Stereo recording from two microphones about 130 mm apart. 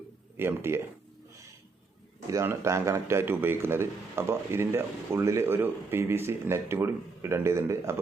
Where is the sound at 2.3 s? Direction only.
25° right (ahead or behind).